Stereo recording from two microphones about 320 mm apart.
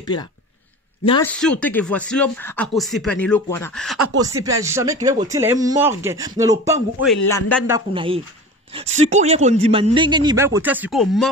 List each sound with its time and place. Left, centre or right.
0.0 s a man's voice: centre
1.3 s speech: centre
4.2 s speech: centre
7.2 s a man's voice: centre
7.6 s speech: centre